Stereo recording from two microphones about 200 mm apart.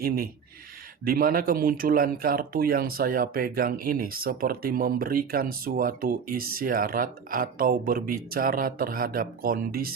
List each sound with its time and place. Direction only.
1.0 s speech: 45° right (ahead or behind)